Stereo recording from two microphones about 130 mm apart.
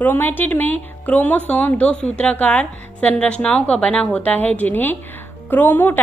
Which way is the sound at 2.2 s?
10° left (ahead or behind).